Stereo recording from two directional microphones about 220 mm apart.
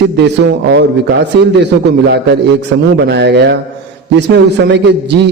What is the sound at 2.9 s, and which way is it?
A man's voice, 50° right (ahead or behind).